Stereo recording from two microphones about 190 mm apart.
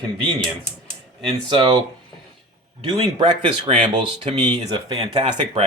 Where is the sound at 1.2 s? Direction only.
25° right (ahead or behind).